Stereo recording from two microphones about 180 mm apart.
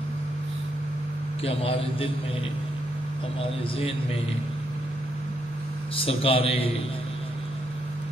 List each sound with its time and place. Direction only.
1.4 s speech: 30° left (ahead or behind)
5.9 s speech: 30° left (ahead or behind)